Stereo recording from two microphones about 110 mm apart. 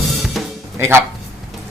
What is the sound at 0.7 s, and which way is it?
Speech, 20° right (ahead or behind).